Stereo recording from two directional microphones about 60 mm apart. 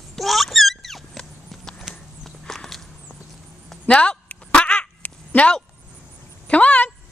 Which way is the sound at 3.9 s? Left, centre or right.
Centre.